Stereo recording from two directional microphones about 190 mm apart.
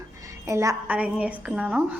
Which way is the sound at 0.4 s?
15° right (ahead or behind).